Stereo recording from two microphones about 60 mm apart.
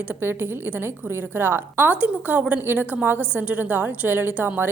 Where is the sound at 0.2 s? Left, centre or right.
Right.